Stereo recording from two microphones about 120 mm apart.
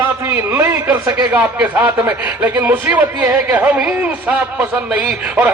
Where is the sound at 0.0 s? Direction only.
20° right (ahead or behind).